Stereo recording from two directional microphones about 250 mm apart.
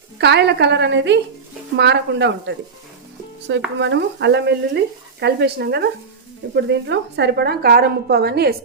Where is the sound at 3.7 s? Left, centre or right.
Right.